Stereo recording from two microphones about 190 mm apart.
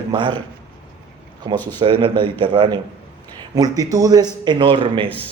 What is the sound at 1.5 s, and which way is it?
Speech, 25° right (ahead or behind).